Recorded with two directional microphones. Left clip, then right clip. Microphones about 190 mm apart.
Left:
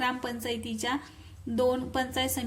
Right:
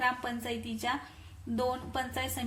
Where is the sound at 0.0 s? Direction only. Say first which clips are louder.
Left 1 dB; 30° left (ahead or behind).